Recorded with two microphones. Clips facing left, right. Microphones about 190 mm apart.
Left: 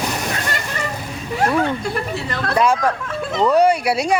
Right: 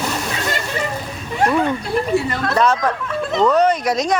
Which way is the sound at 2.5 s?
10° left (ahead or behind).